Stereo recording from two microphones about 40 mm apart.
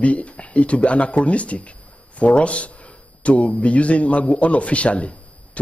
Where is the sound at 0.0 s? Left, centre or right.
Left.